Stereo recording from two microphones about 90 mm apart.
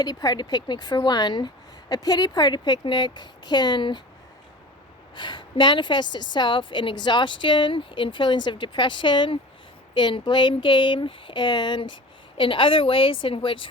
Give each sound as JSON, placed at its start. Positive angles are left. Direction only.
{"t": 0.0, "sound": "speech", "side_deg": 45}
{"t": 5.1, "sound": "a woman's voice", "side_deg": 60}
{"t": 12.4, "sound": "a woman's voice", "side_deg": 75}